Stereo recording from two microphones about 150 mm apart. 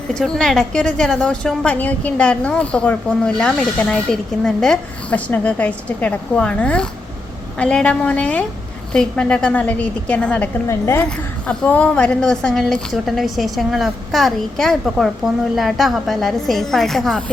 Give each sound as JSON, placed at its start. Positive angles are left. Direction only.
{"t": 0.1, "sound": "a woman's voice", "side_deg": 5}
{"t": 10.7, "sound": "a woman's voice", "side_deg": 20}
{"t": 11.0, "sound": "a woman's voice", "side_deg": 10}